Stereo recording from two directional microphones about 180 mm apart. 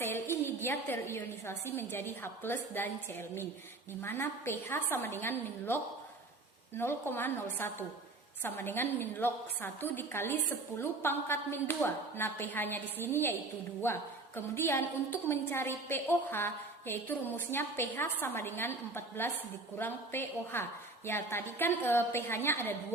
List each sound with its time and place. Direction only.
0.0 s a woman's voice: 10° left (ahead or behind)